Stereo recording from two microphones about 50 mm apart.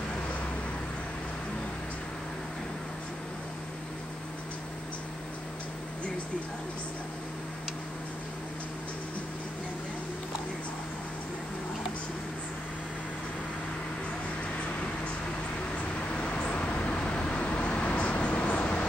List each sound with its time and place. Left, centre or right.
16.1 s vehicle: left